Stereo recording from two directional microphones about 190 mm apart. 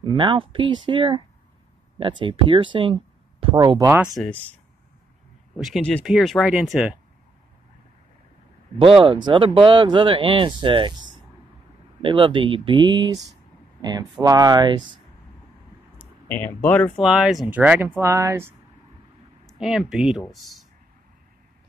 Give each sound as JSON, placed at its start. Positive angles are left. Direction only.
{"t": 0.0, "sound": "speech", "side_deg": -25}
{"t": 4.2, "sound": "speech", "side_deg": 10}
{"t": 5.6, "sound": "speech", "side_deg": 0}
{"t": 8.7, "sound": "speech", "side_deg": -30}
{"t": 16.0, "sound": "speech", "side_deg": 10}
{"t": 17.0, "sound": "speech", "side_deg": -5}
{"t": 19.4, "sound": "speech", "side_deg": 0}